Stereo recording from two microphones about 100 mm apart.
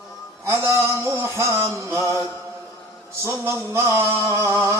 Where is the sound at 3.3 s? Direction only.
30° right (ahead or behind).